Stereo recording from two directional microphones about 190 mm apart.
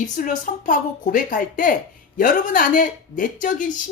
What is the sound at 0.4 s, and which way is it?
A woman's voice, 45° left (ahead or behind).